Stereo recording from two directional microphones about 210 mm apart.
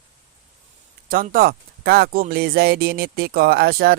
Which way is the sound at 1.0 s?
40° right (ahead or behind).